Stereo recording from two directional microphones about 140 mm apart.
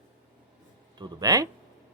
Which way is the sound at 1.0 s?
25° right (ahead or behind).